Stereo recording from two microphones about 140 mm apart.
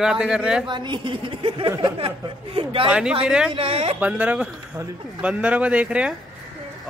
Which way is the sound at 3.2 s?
5° right (ahead or behind).